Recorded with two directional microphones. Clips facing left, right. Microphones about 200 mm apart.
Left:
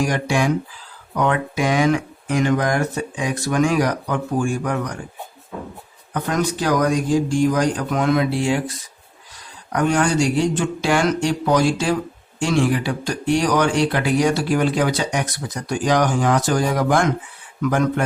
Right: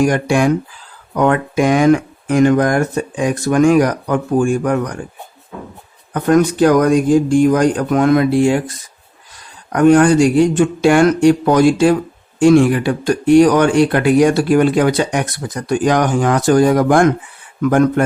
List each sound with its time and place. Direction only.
0.0 s speech: 55° right (ahead or behind)
6.1 s speech: 55° right (ahead or behind)
9.7 s speech: 55° right (ahead or behind)